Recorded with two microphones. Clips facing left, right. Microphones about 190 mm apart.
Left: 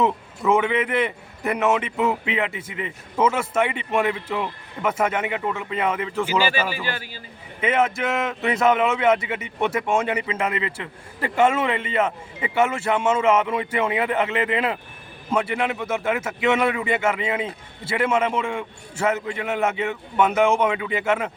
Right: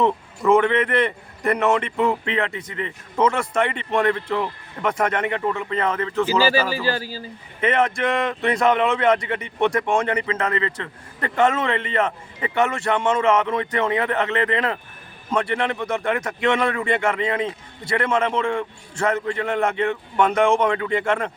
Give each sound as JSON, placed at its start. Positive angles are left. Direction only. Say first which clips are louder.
{"t": 0.0, "sound": "a man's voice", "louder": "right 2 dB", "side_deg": 5}
{"t": 6.4, "sound": "a man's voice", "louder": "right 4 dB", "side_deg": -40}
{"t": 7.6, "sound": "a man's voice", "louder": "right 1 dB", "side_deg": 5}